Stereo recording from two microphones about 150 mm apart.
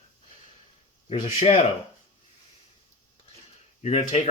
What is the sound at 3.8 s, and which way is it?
Speech, 45° left (ahead or behind).